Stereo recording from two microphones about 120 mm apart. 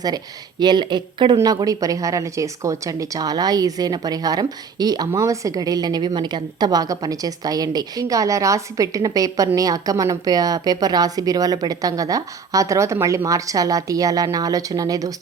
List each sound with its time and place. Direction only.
0.6 s a woman's voice: 35° right (ahead or behind)